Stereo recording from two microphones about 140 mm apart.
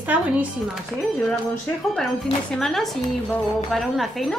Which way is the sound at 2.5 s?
Centre (ahead or behind).